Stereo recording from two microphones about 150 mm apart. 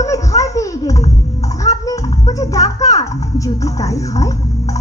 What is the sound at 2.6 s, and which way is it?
Speech, 45° left (ahead or behind).